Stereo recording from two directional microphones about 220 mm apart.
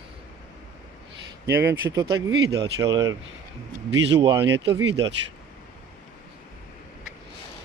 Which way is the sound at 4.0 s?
55° right (ahead or behind).